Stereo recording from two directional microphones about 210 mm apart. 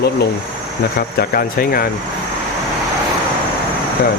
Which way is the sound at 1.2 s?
45° left (ahead or behind).